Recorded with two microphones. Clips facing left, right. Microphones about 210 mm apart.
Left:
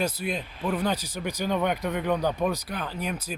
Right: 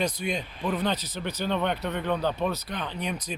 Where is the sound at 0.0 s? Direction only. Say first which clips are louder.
Even; 5° left (ahead or behind).